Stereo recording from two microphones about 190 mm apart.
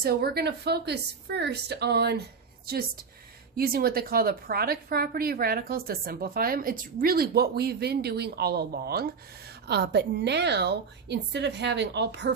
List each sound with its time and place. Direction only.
0.0 s a woman's voice: 55° right (ahead or behind)
3.6 s a woman's voice: 50° right (ahead or behind)